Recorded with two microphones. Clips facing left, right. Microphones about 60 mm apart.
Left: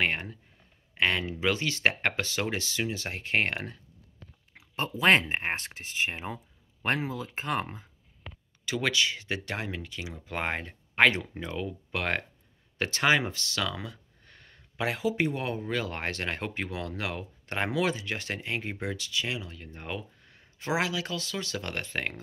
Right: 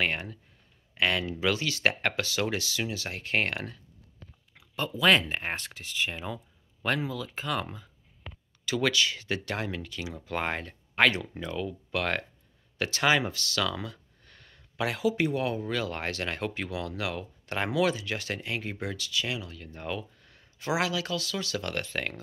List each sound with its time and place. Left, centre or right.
0.0 s speech: left
8.6 s speech: centre